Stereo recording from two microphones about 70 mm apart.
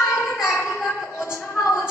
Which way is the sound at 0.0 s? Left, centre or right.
Left.